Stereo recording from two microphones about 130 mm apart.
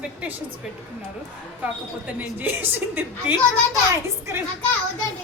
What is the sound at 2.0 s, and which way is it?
A woman's voice, 10° right (ahead or behind).